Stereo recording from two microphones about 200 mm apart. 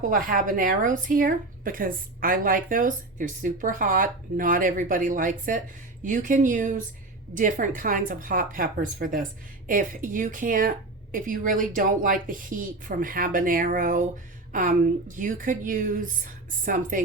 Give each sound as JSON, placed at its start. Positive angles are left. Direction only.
{"t": 0.0, "sound": "a woman's voice", "side_deg": -45}